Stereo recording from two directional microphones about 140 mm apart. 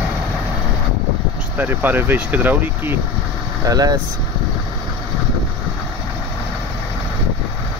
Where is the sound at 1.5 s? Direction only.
15° right (ahead or behind).